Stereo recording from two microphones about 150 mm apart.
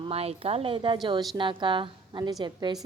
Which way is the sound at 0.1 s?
40° right (ahead or behind).